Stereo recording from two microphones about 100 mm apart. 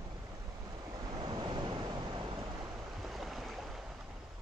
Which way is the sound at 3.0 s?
Centre (ahead or behind).